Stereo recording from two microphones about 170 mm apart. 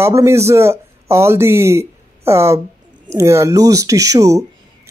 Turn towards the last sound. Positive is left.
turn(degrees=-20)  # may be behind; listen again after turning